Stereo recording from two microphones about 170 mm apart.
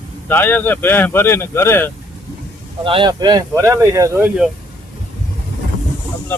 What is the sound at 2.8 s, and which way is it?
Speech, 30° right (ahead or behind).